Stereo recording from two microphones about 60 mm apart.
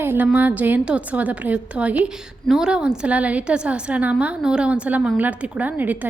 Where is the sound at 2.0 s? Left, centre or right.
Centre.